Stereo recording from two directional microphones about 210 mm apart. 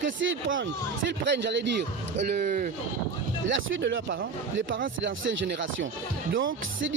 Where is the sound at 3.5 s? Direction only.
60° right (ahead or behind).